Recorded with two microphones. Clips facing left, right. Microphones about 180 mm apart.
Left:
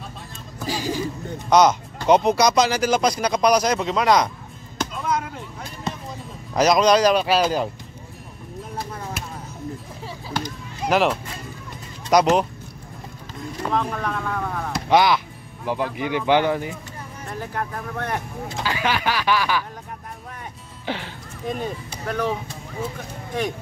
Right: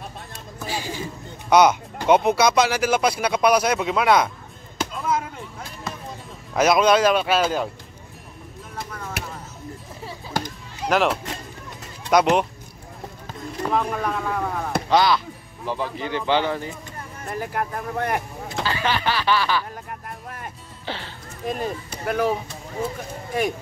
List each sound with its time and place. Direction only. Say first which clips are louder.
0.7 s speech: left 4 dB; 40° left (ahead or behind)
1.5 s speech: even; 10° right (ahead or behind)
4.7 s music: even; 5° right (ahead or behind)
6.5 s speech: left 1 dB; 5° right (ahead or behind)
10.9 s speech: left 1 dB; centre (ahead or behind)
13.7 s speech: right 1 dB; 5° right (ahead or behind)
14.9 s speech: left 2 dB; 15° left (ahead or behind)
17.3 s speech: right 2 dB; 10° right (ahead or behind)
18.6 s speech: even; 10° left (ahead or behind)
20.8 s speech: left 3 dB; 15° left (ahead or behind)
21.5 s speech: right 1 dB; 5° right (ahead or behind)
23.3 s speech: right 2 dB; 10° right (ahead or behind)